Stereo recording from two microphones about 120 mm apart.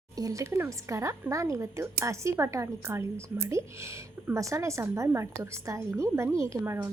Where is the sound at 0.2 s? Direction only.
25° right (ahead or behind).